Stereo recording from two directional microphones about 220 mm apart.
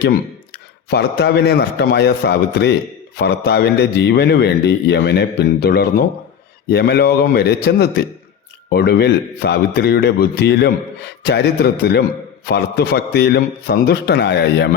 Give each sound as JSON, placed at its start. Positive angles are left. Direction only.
{"t": 0.9, "sound": "a man's voice", "side_deg": 50}